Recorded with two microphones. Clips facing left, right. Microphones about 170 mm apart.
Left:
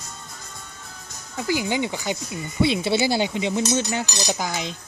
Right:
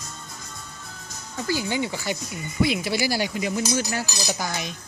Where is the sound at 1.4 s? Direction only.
15° left (ahead or behind).